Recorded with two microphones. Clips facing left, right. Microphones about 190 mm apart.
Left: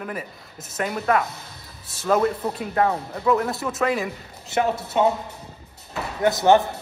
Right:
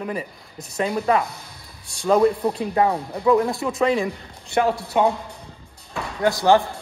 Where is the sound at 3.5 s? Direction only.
5° left (ahead or behind).